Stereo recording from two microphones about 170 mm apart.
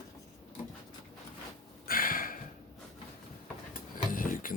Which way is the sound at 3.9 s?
55° left (ahead or behind).